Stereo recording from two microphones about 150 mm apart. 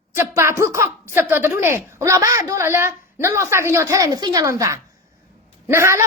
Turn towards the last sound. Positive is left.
turn(degrees=-20)  # may be behind; listen again after turning